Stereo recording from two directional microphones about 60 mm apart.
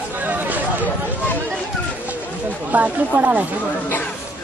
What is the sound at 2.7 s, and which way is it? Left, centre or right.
Speech, right.